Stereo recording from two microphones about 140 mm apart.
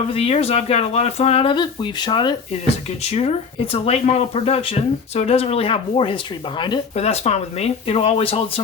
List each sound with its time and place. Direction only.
0.1 s speech: 45° left (ahead or behind)
3.0 s speech: 50° left (ahead or behind)
6.9 s speech: 50° left (ahead or behind)